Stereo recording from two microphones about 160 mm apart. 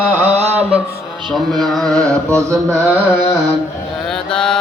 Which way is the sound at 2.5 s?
15° right (ahead or behind).